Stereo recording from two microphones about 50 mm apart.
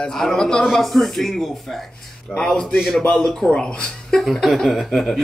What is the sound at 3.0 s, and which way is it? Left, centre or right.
Speech, left.